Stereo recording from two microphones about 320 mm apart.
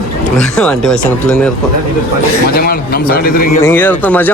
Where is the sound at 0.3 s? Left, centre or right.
Centre.